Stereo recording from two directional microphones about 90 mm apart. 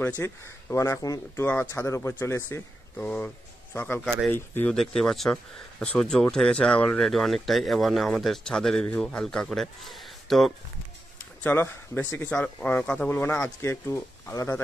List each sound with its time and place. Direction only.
0.2 s speech: 30° left (ahead or behind)
1.3 s speech: 20° left (ahead or behind)
4.3 s speech: 25° left (ahead or behind)
4.7 s speech: 5° left (ahead or behind)
7.0 s a man's voice: 5° left (ahead or behind)
11.4 s speech: 25° left (ahead or behind)
13.1 s speech: 25° left (ahead or behind)